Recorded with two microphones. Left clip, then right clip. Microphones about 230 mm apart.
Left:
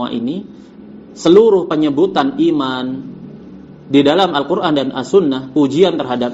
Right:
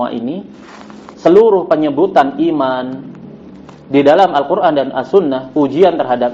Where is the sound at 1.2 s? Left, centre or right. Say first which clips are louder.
Right 1 dB; left.